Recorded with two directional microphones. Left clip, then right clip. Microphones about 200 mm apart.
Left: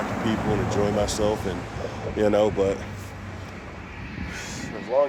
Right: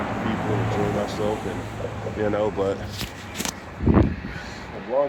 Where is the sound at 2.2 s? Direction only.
50° left (ahead or behind).